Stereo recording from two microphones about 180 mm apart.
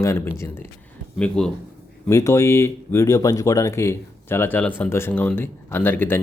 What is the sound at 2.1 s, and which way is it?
Speech, 15° left (ahead or behind).